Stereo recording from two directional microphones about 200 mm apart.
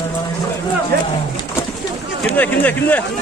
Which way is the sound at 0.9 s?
55° right (ahead or behind).